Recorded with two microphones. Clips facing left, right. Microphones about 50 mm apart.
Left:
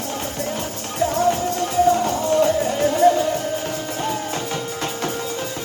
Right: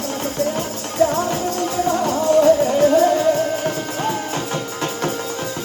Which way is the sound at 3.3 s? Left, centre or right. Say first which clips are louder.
Right 4 dB; right.